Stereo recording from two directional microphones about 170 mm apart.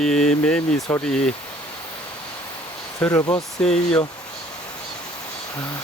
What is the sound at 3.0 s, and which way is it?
Speech, 5° left (ahead or behind).